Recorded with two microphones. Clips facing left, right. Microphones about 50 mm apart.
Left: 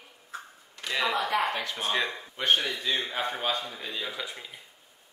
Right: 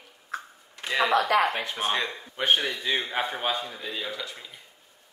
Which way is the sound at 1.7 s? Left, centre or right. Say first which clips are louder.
Even; centre.